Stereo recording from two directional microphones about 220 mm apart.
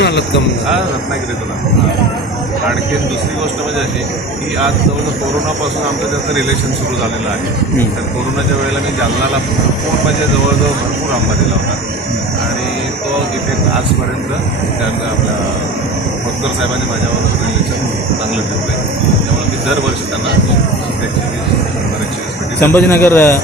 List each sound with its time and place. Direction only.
0.0 s jingle bell: 50° left (ahead or behind)
22.6 s a man's voice: 10° left (ahead or behind)